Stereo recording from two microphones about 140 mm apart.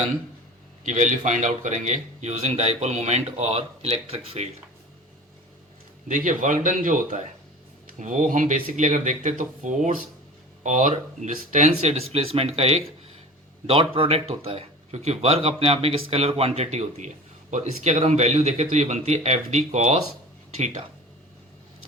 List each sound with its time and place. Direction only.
0.9 s speech: 60° right (ahead or behind)
6.1 s speech: 65° right (ahead or behind)